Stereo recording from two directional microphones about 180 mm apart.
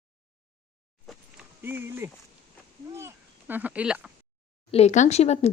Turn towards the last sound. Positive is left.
turn(degrees=35)  # may be behind; listen again after turning